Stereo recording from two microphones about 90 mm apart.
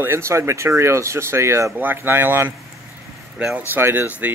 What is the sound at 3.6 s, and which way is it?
Speech, 25° right (ahead or behind).